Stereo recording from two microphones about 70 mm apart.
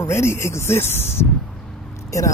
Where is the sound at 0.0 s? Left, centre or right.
Left.